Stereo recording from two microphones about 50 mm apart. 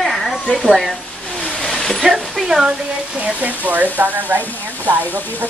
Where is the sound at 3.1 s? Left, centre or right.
Right.